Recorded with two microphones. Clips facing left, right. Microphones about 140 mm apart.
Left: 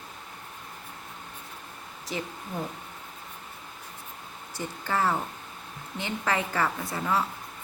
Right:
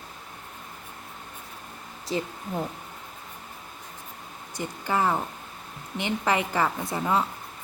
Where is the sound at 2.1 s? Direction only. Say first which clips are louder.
Right 5 dB; 30° right (ahead or behind).